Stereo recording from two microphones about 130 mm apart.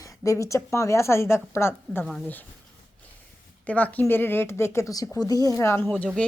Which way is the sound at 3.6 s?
10° left (ahead or behind).